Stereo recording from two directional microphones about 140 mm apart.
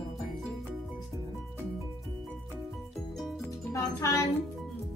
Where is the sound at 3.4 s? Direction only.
20° left (ahead or behind).